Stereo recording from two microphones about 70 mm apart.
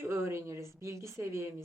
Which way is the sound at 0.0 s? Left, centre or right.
Right.